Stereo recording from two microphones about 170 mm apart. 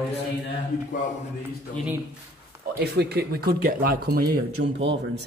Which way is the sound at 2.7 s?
70° right (ahead or behind).